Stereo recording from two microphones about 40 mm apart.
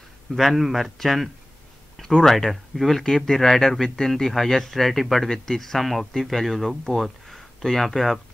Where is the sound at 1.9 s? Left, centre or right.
Centre.